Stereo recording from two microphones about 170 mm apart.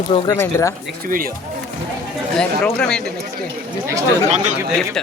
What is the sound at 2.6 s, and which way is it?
Speech, 5° left (ahead or behind).